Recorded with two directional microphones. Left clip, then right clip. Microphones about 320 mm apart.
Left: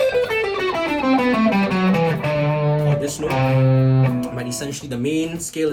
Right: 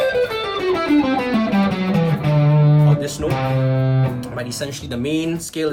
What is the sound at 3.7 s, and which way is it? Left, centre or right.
Music, left.